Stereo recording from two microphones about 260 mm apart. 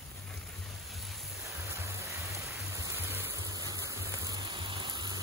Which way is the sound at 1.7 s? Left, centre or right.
Centre.